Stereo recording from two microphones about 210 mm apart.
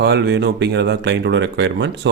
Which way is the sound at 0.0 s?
55° right (ahead or behind).